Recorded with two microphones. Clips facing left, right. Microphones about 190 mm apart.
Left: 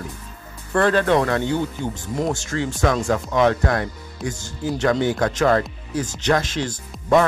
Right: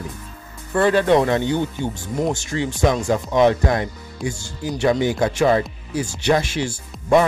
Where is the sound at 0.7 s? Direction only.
10° right (ahead or behind).